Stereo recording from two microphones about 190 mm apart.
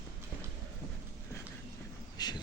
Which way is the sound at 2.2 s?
20° left (ahead or behind).